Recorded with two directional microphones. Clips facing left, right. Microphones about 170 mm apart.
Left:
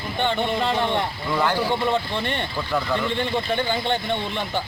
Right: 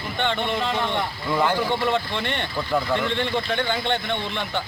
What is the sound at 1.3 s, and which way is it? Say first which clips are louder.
Speech: right 1 dB; 5° right (ahead or behind).